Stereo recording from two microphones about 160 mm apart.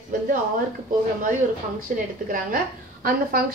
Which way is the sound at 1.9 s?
60° right (ahead or behind).